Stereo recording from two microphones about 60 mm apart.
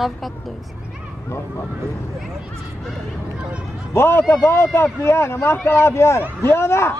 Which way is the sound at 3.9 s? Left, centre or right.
Left.